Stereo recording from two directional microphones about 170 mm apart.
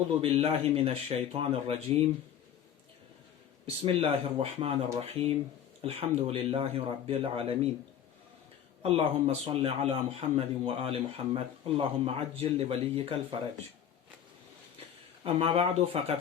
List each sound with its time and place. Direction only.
0.2 s a man's voice: 35° right (ahead or behind)
3.8 s a man's voice: 35° right (ahead or behind)
8.8 s a man's voice: 35° right (ahead or behind)
14.8 s speech: 35° right (ahead or behind)